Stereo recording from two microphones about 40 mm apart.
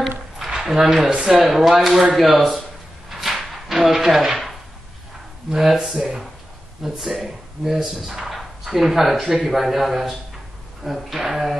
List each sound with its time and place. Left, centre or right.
0.5 s speech: centre
1.5 s a man's voice: centre
3.1 s a sound: centre
3.6 s speech: centre
5.5 s speech: centre
8.4 s a sound: centre
9.2 s a man's voice: centre